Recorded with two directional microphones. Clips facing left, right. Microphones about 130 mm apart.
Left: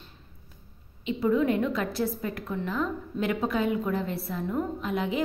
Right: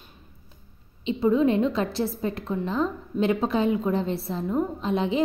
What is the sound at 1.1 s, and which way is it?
A woman's voice, 25° right (ahead or behind).